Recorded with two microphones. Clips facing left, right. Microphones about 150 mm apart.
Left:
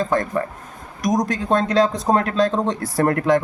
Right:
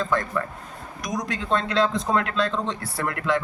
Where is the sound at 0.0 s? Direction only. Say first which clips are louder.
Left 4 dB; 45° left (ahead or behind).